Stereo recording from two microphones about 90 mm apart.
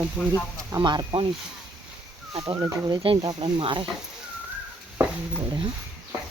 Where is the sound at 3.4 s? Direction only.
70° right (ahead or behind).